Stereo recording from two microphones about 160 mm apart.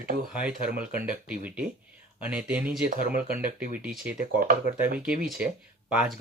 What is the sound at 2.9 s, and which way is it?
Speech, 65° right (ahead or behind).